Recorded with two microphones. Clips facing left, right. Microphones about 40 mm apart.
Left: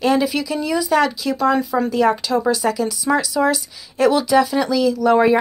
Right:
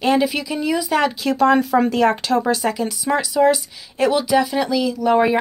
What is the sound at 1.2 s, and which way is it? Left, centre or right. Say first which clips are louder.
Speech: right 2 dB; right.